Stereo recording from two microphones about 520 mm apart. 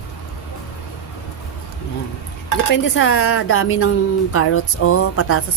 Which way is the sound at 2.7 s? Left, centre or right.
Left.